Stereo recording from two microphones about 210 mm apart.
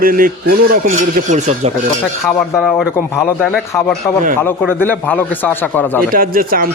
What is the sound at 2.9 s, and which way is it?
Speech, 10° left (ahead or behind).